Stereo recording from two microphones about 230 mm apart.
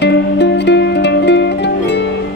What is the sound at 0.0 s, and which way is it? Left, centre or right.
Music, left.